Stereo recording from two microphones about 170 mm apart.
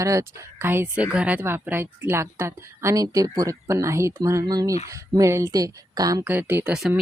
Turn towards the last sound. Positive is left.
turn(degrees=-5)  # may be behind; listen again after turning